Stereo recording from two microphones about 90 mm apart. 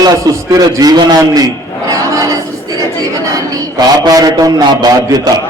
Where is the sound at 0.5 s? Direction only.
45° right (ahead or behind).